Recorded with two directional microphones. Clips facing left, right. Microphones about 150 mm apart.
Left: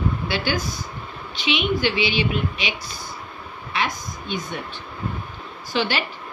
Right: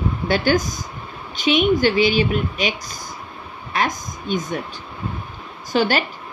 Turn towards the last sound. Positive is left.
turn(degrees=-45)  # may be behind; listen again after turning